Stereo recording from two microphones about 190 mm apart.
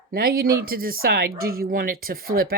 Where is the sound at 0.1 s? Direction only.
50° right (ahead or behind).